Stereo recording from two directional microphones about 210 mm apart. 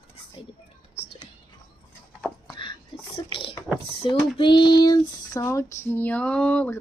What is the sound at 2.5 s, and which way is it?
Whispering, 25° left (ahead or behind).